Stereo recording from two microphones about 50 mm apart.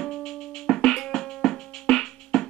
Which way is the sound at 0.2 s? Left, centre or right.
Centre.